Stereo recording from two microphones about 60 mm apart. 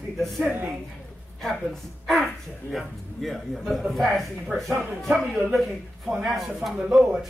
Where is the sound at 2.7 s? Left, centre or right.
Centre.